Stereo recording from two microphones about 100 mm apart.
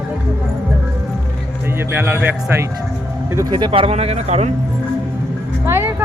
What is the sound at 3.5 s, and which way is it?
Speech, 50° right (ahead or behind).